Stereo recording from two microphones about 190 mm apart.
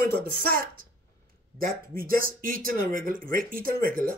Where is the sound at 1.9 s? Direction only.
50° right (ahead or behind).